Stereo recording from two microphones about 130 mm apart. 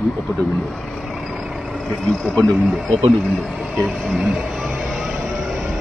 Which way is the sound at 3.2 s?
Centre (ahead or behind).